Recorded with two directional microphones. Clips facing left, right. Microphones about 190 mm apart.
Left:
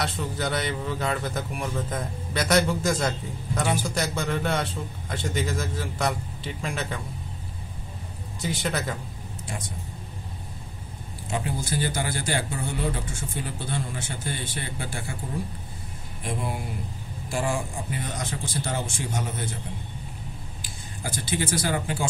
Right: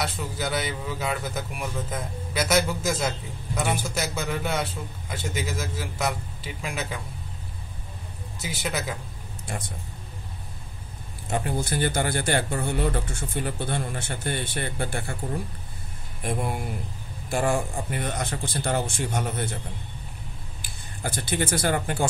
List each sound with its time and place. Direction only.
0.0 s a man's voice: 5° right (ahead or behind)
8.4 s a man's voice: 5° right (ahead or behind)
11.2 s a man's voice: 55° right (ahead or behind)
16.2 s a man's voice: 55° right (ahead or behind)
20.6 s speech: 60° right (ahead or behind)